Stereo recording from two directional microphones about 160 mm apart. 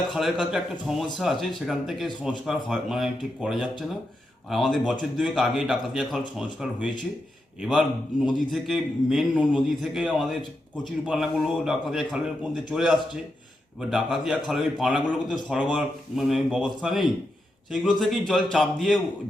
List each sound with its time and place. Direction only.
0.1 s a man's voice: centre (ahead or behind)